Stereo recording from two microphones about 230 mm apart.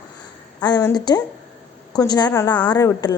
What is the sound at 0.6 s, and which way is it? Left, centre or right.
A woman's voice, centre.